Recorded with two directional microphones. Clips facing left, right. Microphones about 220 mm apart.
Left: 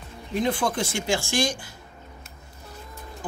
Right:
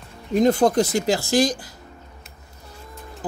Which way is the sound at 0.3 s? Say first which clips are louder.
Right 8 dB; 40° right (ahead or behind).